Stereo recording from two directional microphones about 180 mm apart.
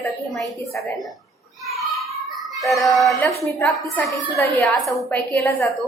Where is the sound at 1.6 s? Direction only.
Centre (ahead or behind).